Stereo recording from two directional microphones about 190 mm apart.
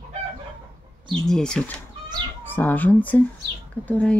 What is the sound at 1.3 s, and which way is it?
Speech, 5° left (ahead or behind).